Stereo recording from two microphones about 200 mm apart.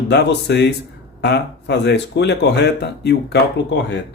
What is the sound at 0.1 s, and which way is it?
Speech, 55° left (ahead or behind).